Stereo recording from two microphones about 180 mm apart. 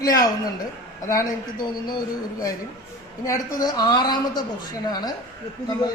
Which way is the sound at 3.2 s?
20° left (ahead or behind).